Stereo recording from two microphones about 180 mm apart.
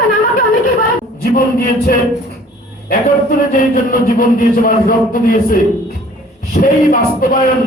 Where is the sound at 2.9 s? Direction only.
50° left (ahead or behind).